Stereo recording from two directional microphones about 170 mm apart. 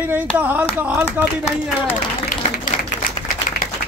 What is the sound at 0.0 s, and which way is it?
Speech, 10° right (ahead or behind).